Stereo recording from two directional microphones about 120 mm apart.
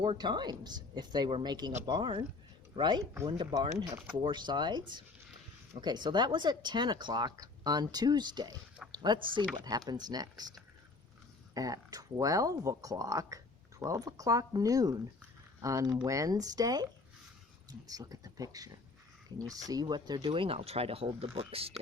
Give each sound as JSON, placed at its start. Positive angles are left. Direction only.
{"t": 0.0, "sound": "speech", "side_deg": -40}
{"t": 3.8, "sound": "speech", "side_deg": -20}
{"t": 4.1, "sound": "speech", "side_deg": -40}
{"t": 11.5, "sound": "speech", "side_deg": -30}
{"t": 20.1, "sound": "speech", "side_deg": -45}